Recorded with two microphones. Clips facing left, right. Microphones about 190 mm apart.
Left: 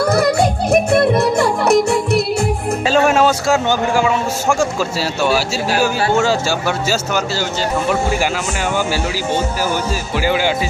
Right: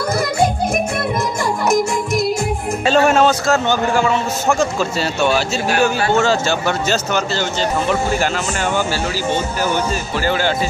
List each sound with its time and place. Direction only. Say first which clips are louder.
1.7 s music: left 2 dB; 65° left (ahead or behind)
2.9 s a man's voice: right 1 dB; 5° left (ahead or behind)
10.2 s speech: left 2 dB; 10° left (ahead or behind)